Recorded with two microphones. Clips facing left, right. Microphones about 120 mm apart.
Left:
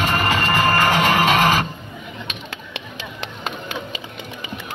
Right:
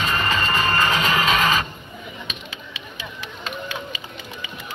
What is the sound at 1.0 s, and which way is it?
Music, 65° left (ahead or behind).